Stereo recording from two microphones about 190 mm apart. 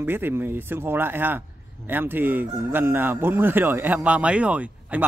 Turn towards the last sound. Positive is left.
turn(degrees=-5)  # may be behind; listen again after turning